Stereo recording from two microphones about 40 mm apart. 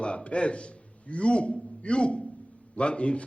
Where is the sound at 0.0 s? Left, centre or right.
Left.